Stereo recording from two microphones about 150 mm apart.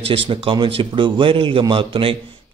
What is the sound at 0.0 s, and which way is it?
A man's voice, 35° right (ahead or behind).